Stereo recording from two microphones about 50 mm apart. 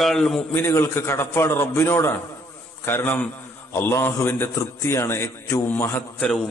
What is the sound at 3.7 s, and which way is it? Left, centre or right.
Speech, left.